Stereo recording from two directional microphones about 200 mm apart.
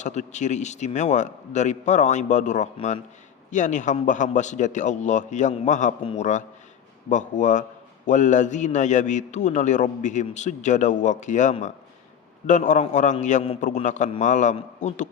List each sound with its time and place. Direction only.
0.0 s a man's voice: 35° left (ahead or behind)